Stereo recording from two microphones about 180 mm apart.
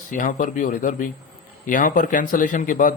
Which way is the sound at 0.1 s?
45° left (ahead or behind).